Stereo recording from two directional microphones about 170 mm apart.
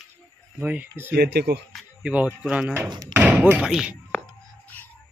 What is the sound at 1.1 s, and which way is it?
Speech, 70° right (ahead or behind).